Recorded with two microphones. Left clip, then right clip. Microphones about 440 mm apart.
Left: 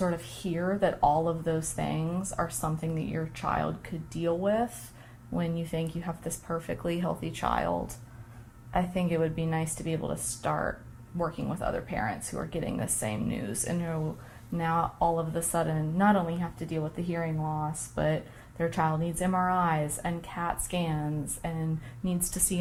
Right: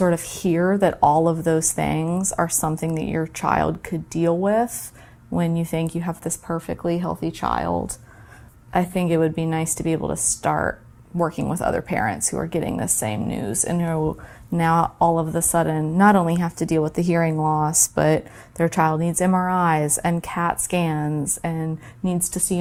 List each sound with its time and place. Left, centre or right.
0.0 s a woman's voice: right